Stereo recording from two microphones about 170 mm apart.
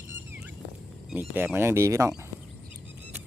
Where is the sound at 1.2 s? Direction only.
10° right (ahead or behind).